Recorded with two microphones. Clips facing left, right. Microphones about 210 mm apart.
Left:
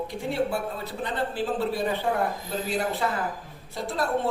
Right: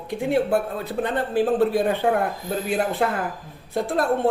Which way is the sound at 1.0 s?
55° right (ahead or behind).